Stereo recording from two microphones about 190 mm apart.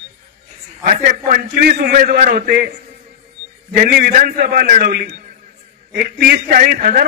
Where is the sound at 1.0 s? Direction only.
50° right (ahead or behind).